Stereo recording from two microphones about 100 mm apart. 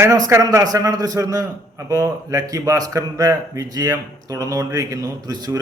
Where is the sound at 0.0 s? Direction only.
30° right (ahead or behind).